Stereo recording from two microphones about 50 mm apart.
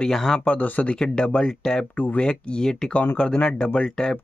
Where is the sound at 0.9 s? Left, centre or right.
Centre.